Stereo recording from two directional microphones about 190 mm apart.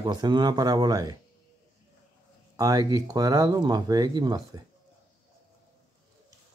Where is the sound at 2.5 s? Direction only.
20° right (ahead or behind).